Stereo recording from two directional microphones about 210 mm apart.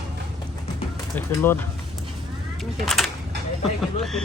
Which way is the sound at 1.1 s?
10° left (ahead or behind).